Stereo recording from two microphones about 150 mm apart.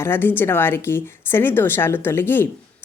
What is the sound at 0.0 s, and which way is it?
A woman's voice, 15° left (ahead or behind).